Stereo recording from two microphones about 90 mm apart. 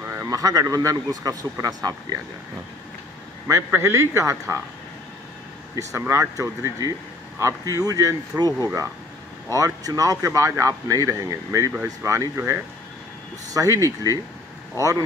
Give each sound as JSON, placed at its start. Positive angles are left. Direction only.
{"t": 0.0, "sound": "a sound", "side_deg": -25}
{"t": 0.3, "sound": "a man's voice", "side_deg": -40}
{"t": 3.4, "sound": "speech", "side_deg": -30}
{"t": 5.8, "sound": "speech", "side_deg": -35}